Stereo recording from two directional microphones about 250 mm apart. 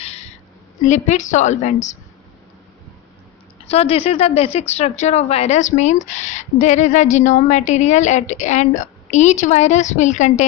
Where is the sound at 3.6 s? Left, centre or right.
Left.